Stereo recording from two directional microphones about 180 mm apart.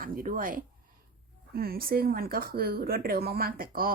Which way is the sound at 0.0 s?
50° right (ahead or behind).